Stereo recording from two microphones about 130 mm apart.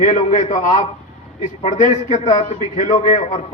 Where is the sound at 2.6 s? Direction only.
75° left (ahead or behind).